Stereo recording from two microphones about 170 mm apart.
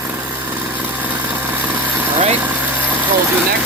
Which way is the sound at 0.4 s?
10° right (ahead or behind).